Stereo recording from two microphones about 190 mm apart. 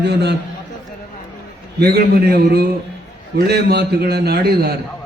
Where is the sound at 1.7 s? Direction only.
55° right (ahead or behind).